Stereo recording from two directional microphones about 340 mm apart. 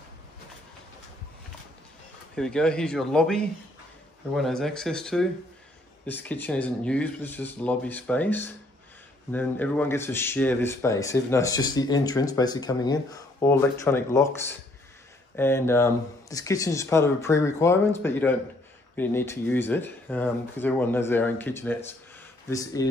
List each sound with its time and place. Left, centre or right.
2.3 s speech: centre